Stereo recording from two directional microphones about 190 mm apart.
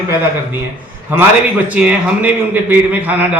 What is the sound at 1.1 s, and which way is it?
A man's voice, 10° right (ahead or behind).